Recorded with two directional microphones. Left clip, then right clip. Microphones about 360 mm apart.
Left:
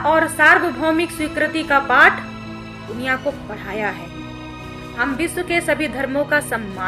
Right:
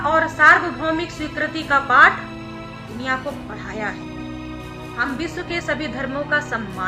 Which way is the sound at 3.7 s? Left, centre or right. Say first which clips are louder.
Left 4 dB; centre.